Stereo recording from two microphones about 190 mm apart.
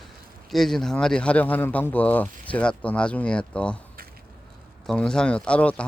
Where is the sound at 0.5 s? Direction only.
Centre (ahead or behind).